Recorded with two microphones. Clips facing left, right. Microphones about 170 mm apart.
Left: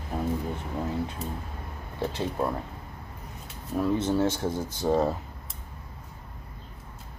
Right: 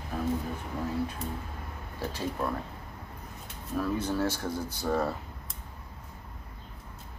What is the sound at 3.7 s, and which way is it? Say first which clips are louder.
Speech: left 4 dB; 20° left (ahead or behind).